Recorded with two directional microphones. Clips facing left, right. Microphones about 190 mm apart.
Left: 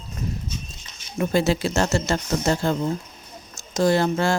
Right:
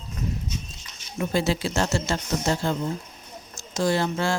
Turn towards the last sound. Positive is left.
turn(degrees=45)  # may be behind; listen again after turning